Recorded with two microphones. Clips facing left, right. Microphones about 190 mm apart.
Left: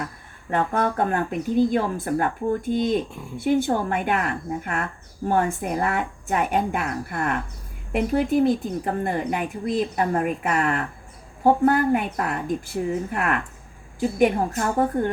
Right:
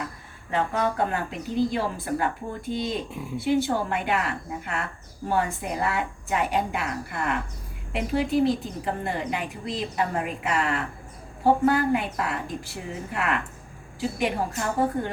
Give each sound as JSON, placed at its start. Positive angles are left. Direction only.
{"t": 0.5, "sound": "speech", "side_deg": 50}